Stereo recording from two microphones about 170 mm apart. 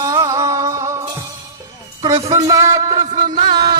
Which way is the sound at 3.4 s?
25° right (ahead or behind).